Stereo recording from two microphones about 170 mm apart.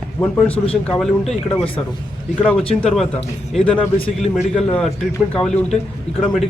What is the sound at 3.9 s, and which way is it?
Speech, 40° left (ahead or behind).